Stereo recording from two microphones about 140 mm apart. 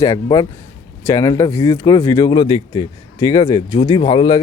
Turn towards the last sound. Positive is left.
turn(degrees=35)  # may be behind; listen again after turning